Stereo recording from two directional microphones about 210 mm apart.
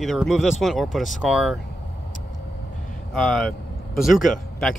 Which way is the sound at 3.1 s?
Centre (ahead or behind).